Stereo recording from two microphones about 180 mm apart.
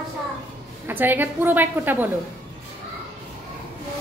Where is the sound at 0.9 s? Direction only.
10° right (ahead or behind).